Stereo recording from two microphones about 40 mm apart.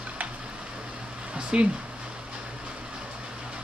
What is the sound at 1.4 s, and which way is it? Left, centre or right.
Speech, right.